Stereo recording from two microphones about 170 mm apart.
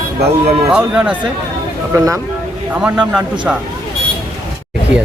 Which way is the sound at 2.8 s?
5° right (ahead or behind).